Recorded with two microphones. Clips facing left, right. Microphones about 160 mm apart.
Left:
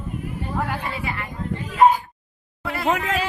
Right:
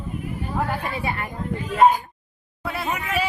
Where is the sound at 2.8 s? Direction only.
90° left.